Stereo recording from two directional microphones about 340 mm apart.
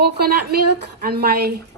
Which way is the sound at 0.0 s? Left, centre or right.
Right.